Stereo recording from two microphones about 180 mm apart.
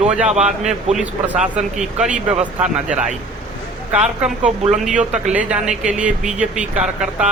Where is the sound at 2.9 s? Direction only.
45° right (ahead or behind).